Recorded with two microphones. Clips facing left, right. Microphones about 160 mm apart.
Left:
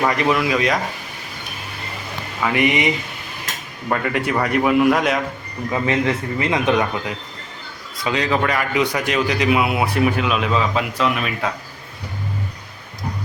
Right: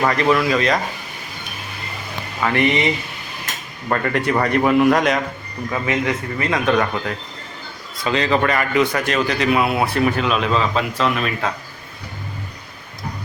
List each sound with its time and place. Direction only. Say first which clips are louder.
0.1 s speech: right 2 dB; 15° left (ahead or behind)
2.4 s a man's voice: even; 10° left (ahead or behind)
5.7 s a man's voice: left 2 dB; 25° left (ahead or behind); by 11.4 s 10° left (ahead or behind)